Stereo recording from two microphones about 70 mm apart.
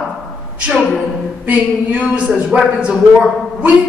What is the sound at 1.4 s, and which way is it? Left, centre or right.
Speech, centre.